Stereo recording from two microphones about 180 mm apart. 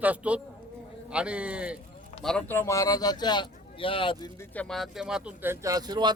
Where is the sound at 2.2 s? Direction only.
10° left (ahead or behind); by 4.3 s 30° left (ahead or behind).